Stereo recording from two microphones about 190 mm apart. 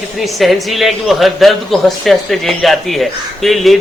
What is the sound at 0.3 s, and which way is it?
Speech, centre (ahead or behind).